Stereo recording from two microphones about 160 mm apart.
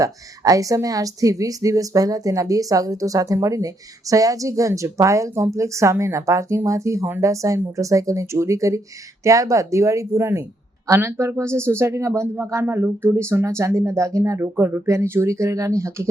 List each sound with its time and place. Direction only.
0.0 s a woman's voice: 20° right (ahead or behind)